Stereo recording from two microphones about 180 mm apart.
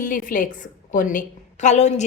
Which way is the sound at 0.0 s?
45° left (ahead or behind).